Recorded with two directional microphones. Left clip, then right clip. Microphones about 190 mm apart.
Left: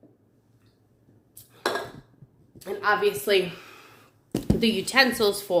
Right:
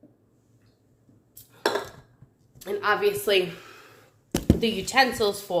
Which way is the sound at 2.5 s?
25° right (ahead or behind).